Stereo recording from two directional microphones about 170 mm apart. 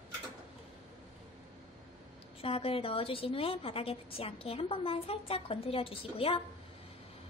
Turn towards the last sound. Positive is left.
turn(degrees=35)  # may be behind; listen again after turning